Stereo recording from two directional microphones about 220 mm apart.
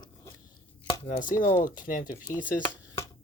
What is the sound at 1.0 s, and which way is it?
Speech, 35° left (ahead or behind).